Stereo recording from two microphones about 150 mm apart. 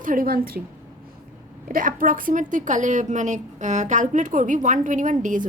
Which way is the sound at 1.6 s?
65° right (ahead or behind).